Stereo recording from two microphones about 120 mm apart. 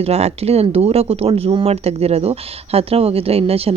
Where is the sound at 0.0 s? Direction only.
60° right (ahead or behind).